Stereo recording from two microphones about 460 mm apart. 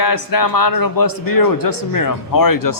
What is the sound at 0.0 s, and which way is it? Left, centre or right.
A man's voice, left.